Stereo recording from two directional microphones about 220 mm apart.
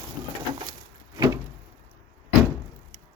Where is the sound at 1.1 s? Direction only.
15° right (ahead or behind).